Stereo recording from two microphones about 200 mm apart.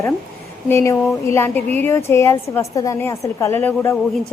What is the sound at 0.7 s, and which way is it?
A woman's voice, 15° left (ahead or behind).